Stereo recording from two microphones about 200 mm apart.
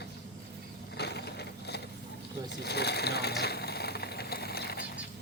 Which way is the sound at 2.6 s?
55° left (ahead or behind).